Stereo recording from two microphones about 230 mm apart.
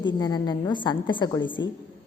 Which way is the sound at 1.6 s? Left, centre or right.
Left.